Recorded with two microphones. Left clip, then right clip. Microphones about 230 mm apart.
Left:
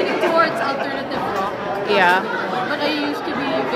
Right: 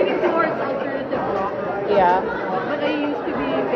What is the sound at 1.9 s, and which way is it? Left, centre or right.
Speech, left.